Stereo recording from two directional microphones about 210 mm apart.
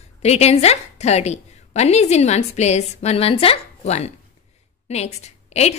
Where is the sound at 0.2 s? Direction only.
30° left (ahead or behind).